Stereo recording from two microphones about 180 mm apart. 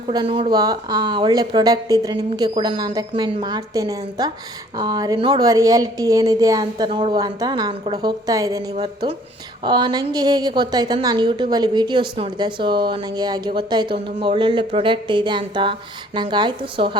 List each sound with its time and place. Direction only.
0.1 s speech: 25° right (ahead or behind)
9.6 s speech: 25° right (ahead or behind)